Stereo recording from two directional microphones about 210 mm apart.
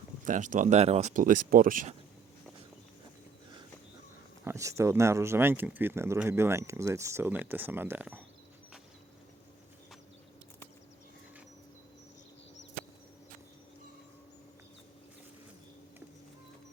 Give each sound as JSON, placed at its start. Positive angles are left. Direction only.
{"t": 0.3, "sound": "speech", "side_deg": -35}
{"t": 4.4, "sound": "speech", "side_deg": -15}